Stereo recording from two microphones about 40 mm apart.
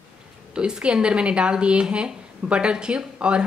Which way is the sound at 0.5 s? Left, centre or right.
Right.